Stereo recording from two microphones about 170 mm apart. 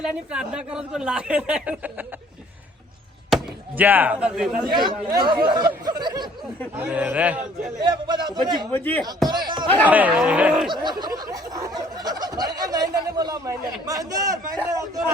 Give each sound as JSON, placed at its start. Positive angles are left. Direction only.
{"t": 0.0, "sound": "speech", "side_deg": -5}
{"t": 3.2, "sound": "speech", "side_deg": -5}
{"t": 4.7, "sound": "speech", "side_deg": -25}
{"t": 6.7, "sound": "speech", "side_deg": -10}
{"t": 7.8, "sound": "speech", "side_deg": -25}
{"t": 9.5, "sound": "a sound", "side_deg": -25}
{"t": 9.8, "sound": "speech", "side_deg": -10}
{"t": 10.7, "sound": "a sound", "side_deg": -25}